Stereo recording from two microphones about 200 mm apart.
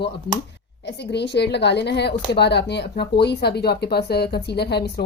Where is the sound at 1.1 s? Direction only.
60° left (ahead or behind).